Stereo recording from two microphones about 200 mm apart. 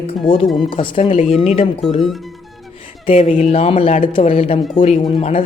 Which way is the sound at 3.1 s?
30° left (ahead or behind).